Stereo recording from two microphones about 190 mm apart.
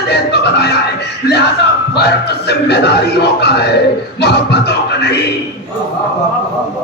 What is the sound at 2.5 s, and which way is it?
Speech, 60° left (ahead or behind).